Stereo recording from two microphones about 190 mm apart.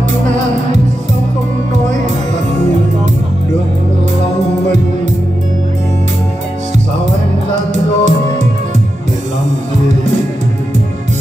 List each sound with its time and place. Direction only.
7.7 s music: 35° right (ahead or behind)